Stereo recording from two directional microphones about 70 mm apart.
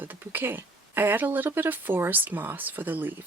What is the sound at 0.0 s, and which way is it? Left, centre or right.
Speech, right.